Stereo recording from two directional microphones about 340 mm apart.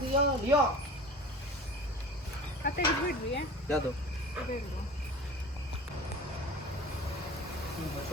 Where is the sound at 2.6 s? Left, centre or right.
Left.